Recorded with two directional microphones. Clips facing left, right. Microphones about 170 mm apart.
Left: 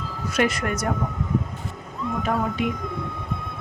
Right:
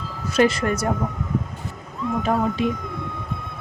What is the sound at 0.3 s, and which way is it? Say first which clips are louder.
Speech: right 4 dB; 30° right (ahead or behind).